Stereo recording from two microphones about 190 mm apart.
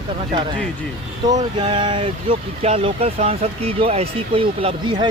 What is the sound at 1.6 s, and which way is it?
Speech, 25° right (ahead or behind).